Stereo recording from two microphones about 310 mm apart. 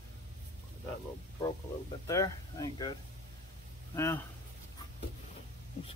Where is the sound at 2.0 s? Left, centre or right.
Centre.